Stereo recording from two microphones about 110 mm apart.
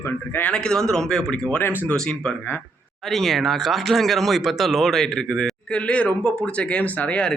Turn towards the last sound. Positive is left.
turn(degrees=10)  # may be behind; listen again after turning